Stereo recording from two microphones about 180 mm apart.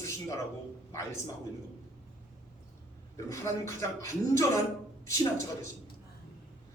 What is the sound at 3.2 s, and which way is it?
A man's voice, 15° left (ahead or behind).